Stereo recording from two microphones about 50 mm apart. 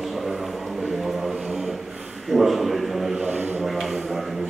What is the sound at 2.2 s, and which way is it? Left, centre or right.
Speech, centre.